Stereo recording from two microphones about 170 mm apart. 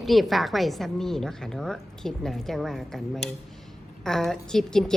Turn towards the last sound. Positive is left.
turn(degrees=5)  # may be behind; listen again after turning